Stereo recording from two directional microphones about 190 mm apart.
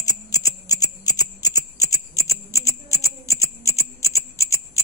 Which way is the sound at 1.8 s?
15° left (ahead or behind).